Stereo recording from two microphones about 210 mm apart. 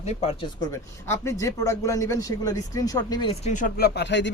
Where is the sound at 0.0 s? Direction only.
30° left (ahead or behind).